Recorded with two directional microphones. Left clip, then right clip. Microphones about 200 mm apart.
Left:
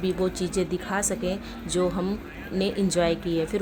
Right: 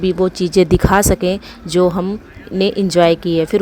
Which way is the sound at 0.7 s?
55° right (ahead or behind).